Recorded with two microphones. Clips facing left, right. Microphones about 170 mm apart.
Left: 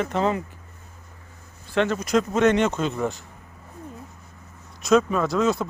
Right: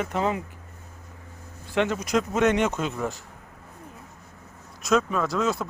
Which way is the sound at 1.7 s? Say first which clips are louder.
Left 2 dB; 15° right (ahead or behind).